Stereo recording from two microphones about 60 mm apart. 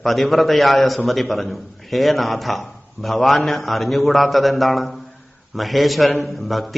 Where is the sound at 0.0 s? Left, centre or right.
Centre.